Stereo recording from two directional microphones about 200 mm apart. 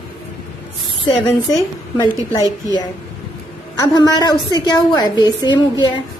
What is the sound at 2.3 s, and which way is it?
A woman's voice, 15° left (ahead or behind).